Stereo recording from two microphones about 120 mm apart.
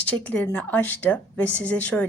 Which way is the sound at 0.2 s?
10° left (ahead or behind).